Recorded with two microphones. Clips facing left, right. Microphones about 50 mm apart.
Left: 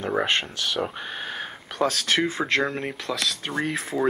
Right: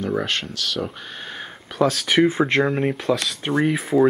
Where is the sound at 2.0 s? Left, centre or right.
Centre.